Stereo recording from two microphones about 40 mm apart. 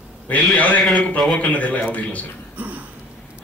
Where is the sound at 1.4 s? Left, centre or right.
Left.